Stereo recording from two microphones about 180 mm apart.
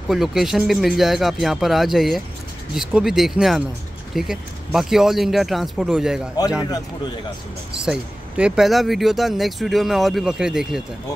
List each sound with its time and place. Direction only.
0.1 s speech: centre (ahead or behind)
7.8 s speech: 5° right (ahead or behind)